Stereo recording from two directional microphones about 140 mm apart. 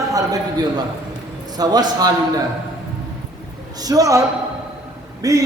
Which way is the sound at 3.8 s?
25° right (ahead or behind).